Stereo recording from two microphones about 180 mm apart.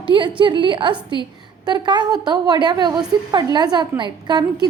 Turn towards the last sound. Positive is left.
turn(degrees=-25)  # may be behind; listen again after turning